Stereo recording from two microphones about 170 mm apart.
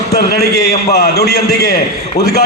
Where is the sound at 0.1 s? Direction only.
65° left (ahead or behind).